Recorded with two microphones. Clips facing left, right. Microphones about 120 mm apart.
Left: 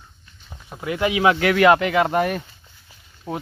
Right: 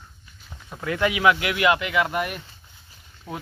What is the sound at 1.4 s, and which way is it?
Speech, 45° left (ahead or behind).